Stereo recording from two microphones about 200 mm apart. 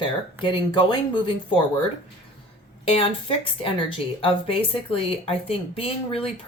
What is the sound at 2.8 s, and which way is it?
Speech, 30° left (ahead or behind).